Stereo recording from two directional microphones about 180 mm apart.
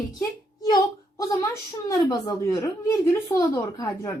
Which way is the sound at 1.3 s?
20° left (ahead or behind).